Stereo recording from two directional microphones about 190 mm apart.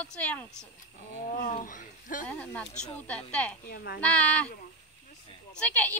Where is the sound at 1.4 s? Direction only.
45° left (ahead or behind).